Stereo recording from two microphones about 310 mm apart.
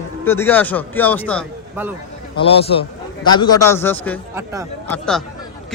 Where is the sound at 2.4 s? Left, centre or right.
Centre.